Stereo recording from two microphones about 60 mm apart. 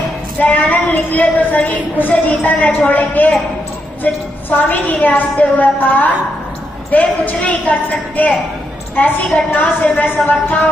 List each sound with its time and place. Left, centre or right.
0.5 s a woman's voice: left